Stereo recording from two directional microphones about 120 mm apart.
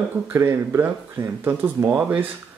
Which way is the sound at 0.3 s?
20° right (ahead or behind).